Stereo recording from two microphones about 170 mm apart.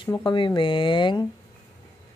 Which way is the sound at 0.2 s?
25° left (ahead or behind).